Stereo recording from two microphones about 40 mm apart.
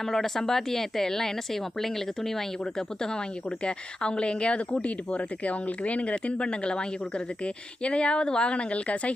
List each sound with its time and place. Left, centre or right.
0.0 s a woman's voice: centre; by 9.1 s left